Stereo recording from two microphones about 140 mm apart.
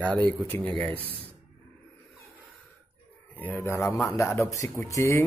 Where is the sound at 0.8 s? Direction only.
40° right (ahead or behind).